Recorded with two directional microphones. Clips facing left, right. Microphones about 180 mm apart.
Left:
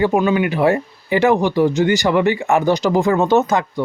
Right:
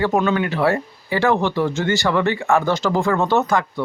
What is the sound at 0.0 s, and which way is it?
Speech, 10° left (ahead or behind).